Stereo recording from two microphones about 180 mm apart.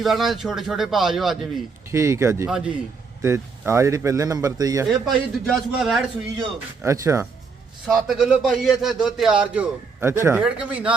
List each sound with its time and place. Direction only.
0.0 s a man's voice: centre (ahead or behind)
1.9 s speech: 15° right (ahead or behind)
2.5 s a man's voice: 5° right (ahead or behind)
3.2 s speech: 15° right (ahead or behind)
5.0 s a man's voice: centre (ahead or behind)
6.8 s speech: 15° right (ahead or behind)
7.9 s a man's voice: centre (ahead or behind)